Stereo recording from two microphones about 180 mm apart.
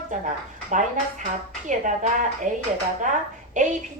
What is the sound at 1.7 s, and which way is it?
Speech, 45° right (ahead or behind).